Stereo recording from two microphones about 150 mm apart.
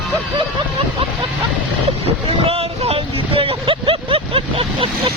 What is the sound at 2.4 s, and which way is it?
Vehicle, 40° right (ahead or behind).